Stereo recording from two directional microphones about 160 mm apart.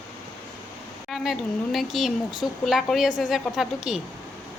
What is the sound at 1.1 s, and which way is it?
A woman's voice, centre (ahead or behind).